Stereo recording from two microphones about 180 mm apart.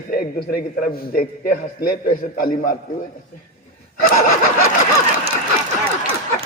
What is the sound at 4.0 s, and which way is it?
Speech, 50° left (ahead or behind).